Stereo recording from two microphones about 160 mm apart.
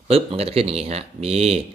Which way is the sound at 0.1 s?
40° right (ahead or behind).